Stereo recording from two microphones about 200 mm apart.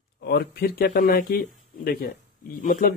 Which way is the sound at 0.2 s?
50° left (ahead or behind).